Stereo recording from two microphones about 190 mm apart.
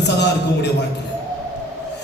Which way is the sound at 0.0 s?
65° left (ahead or behind).